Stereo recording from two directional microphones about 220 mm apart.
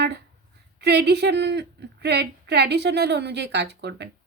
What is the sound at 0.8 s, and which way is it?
A woman's voice, 50° right (ahead or behind).